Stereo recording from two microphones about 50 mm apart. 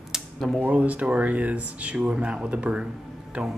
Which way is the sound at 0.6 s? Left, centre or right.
Right.